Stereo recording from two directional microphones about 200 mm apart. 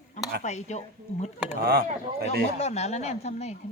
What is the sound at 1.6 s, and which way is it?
Speech, 50° right (ahead or behind).